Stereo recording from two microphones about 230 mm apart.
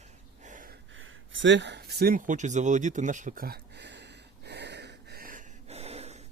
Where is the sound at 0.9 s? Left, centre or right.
Right.